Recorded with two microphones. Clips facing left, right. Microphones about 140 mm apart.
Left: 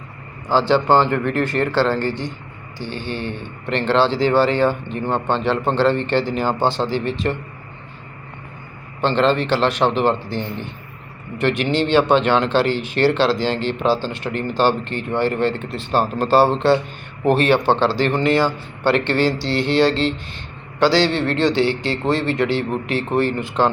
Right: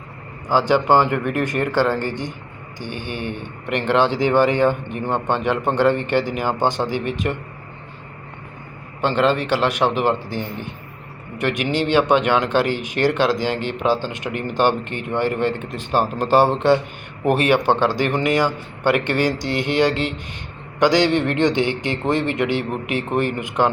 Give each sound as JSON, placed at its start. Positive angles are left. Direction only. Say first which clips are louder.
{"t": 0.4, "sound": "speech", "louder": "left 1 dB", "side_deg": -15}
{"t": 9.0, "sound": "speech", "louder": "left 1 dB", "side_deg": -10}